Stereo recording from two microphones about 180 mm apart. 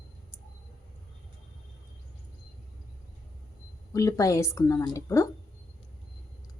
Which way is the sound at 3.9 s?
20° left (ahead or behind).